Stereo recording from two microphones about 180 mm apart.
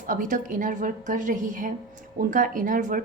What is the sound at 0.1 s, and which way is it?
Speech, 45° right (ahead or behind).